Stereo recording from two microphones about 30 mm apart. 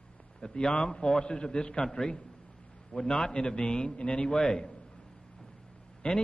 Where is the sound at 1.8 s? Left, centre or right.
Centre.